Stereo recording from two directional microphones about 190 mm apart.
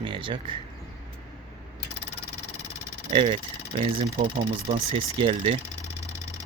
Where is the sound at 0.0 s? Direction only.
25° right (ahead or behind).